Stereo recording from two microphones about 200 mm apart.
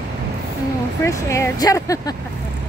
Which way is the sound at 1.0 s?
15° left (ahead or behind).